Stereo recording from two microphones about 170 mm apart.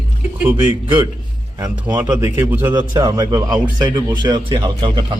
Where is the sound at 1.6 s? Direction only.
25° right (ahead or behind).